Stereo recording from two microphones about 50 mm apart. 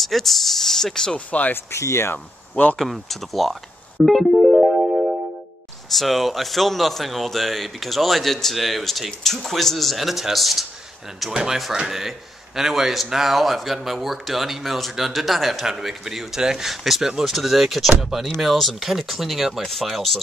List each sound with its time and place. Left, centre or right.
0.0 s speech: centre
1.1 s speech: left
1.5 s speech: left
2.8 s speech: centre
4.6 s music: centre
5.9 s speech: centre